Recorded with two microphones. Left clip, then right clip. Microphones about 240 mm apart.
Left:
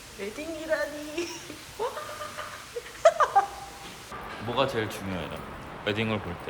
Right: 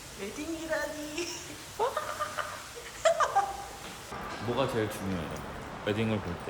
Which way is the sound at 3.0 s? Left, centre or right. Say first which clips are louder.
Left 5 dB; centre.